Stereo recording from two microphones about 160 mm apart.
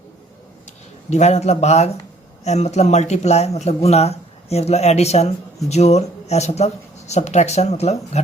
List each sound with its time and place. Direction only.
1.1 s a man's voice: 45° left (ahead or behind)